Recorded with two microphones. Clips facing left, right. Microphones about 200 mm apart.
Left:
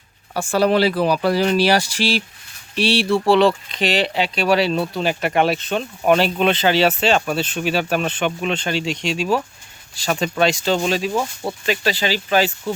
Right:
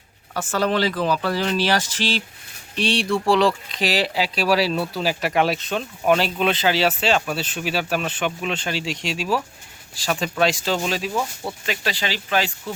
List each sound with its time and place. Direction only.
0.3 s speech: 10° left (ahead or behind)
11.1 s speech: 30° left (ahead or behind)
11.9 s speech: centre (ahead or behind)